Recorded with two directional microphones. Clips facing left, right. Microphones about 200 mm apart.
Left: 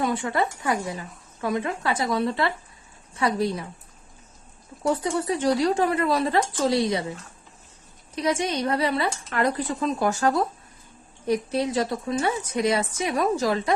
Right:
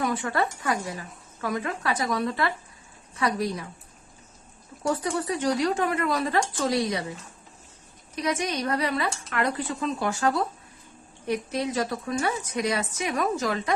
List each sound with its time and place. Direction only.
0.0 s a woman's voice: 25° left (ahead or behind)
4.8 s a woman's voice: 25° left (ahead or behind)
8.1 s a woman's voice: 30° left (ahead or behind)
11.3 s a woman's voice: 30° left (ahead or behind)